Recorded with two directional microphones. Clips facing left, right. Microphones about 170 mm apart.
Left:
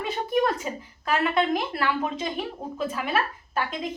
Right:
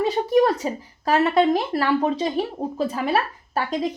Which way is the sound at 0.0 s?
40° right (ahead or behind).